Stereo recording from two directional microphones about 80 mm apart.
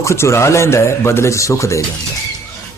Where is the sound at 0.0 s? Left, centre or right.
Left.